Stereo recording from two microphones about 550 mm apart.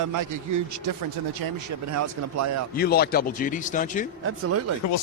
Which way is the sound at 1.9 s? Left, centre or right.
Right.